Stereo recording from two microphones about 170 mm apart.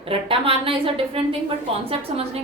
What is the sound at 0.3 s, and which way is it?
A woman's voice, 30° right (ahead or behind).